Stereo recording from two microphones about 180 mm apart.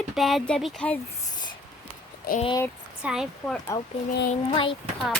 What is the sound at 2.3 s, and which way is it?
Speech, 55° left (ahead or behind).